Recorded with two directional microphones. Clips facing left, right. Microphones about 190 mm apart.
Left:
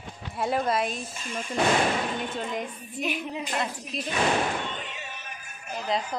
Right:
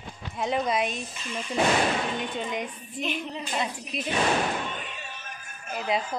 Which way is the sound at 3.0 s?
10° left (ahead or behind).